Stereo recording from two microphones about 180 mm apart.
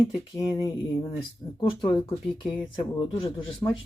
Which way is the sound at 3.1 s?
25° left (ahead or behind).